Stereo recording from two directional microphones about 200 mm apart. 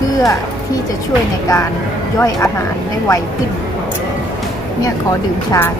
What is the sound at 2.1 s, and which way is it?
Speech, 15° left (ahead or behind).